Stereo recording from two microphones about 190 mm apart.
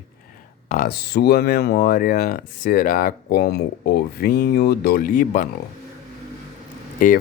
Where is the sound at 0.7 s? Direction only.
50° left (ahead or behind).